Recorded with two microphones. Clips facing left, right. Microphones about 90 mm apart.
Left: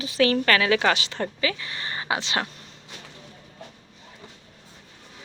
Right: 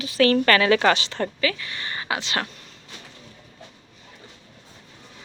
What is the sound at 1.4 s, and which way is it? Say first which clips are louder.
Speech: right 2 dB; 20° left (ahead or behind).